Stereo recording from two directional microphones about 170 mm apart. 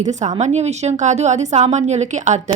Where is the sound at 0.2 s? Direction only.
40° right (ahead or behind).